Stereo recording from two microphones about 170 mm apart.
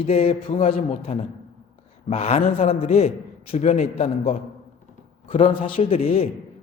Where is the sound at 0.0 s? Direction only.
35° left (ahead or behind).